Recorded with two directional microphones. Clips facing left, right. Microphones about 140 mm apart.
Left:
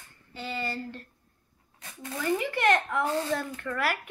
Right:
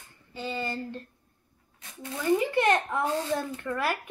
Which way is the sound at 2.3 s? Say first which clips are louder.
Right 2 dB; 20° right (ahead or behind).